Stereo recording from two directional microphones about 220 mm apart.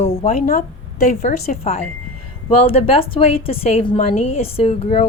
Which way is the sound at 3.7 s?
30° left (ahead or behind).